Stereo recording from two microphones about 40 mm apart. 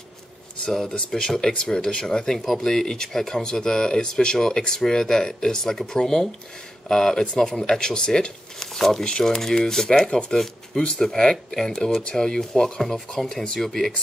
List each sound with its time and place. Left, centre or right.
0.7 s speech: centre
0.9 s speech: left
2.4 s speech: centre
2.7 s speech: centre
8.7 s speech: centre
9.0 s speech: centre